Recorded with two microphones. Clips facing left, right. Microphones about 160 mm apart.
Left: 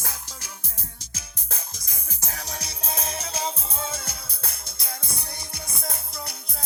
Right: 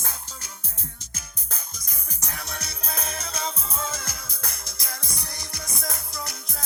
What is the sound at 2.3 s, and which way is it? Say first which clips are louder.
Music: even; 35° left (ahead or behind).